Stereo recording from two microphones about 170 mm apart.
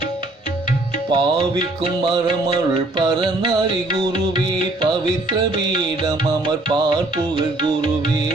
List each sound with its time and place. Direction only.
1.1 s music: 25° right (ahead or behind)
3.0 s music: 25° right (ahead or behind)